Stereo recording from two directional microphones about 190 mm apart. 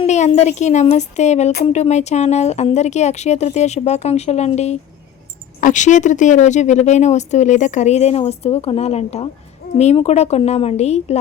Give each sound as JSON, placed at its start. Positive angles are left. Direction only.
{"t": 0.0, "sound": "wind chime", "side_deg": 35}
{"t": 0.3, "sound": "speech", "side_deg": 35}